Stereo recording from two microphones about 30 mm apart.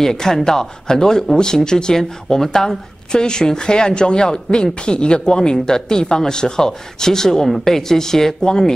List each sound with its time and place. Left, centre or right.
0.0 s a woman's voice: centre